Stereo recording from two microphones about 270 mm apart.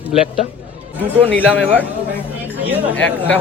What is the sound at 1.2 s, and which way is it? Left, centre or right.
Speech, centre.